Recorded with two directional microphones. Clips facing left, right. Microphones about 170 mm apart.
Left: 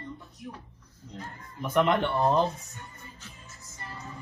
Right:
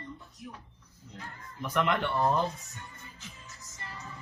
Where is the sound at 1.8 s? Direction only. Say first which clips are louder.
Left 3 dB; 25° left (ahead or behind).